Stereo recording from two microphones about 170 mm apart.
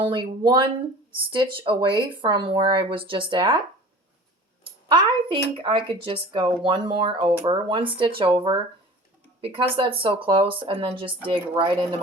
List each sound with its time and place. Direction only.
0.0 s speech: 30° right (ahead or behind)
4.6 s speech: 30° right (ahead or behind)